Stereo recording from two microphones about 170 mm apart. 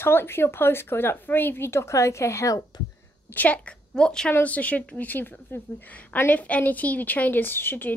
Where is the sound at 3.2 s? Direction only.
10° left (ahead or behind).